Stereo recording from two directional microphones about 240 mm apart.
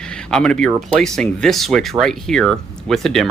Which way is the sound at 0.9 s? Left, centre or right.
Centre.